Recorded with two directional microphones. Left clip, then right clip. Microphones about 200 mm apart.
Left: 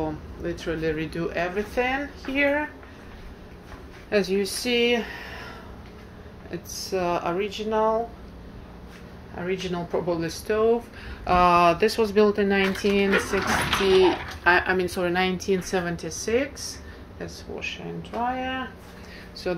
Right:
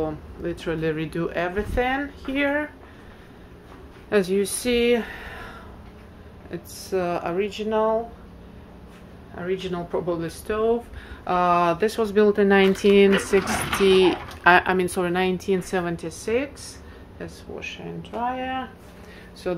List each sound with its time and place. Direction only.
0.0 s speech: 25° right (ahead or behind)
4.1 s speech: 35° right (ahead or behind)
4.9 s speech: 20° right (ahead or behind)
6.5 s speech: 15° right (ahead or behind)
9.3 s speech: 5° right (ahead or behind)
17.2 s speech: 10° right (ahead or behind)